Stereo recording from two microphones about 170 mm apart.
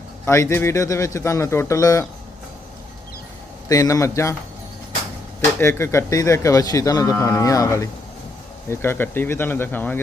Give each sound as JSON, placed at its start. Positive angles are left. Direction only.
{"t": 0.3, "sound": "a man's voice", "side_deg": 15}
{"t": 3.7, "sound": "a man's voice", "side_deg": 20}
{"t": 5.5, "sound": "a man's voice", "side_deg": 15}